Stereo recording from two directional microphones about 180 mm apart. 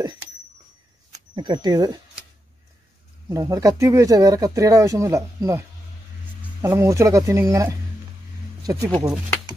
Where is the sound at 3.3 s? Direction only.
20° right (ahead or behind).